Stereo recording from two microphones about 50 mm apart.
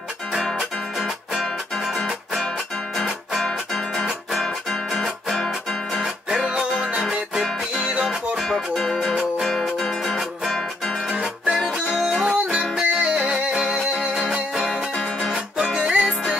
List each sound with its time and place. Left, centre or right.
0.9 s music: centre
3.0 s music: centre
5.9 s music: centre
8.4 s music: centre
11.1 s music: centre
15.3 s music: centre